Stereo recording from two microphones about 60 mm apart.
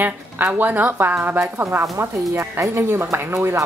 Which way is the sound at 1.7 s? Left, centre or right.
Right.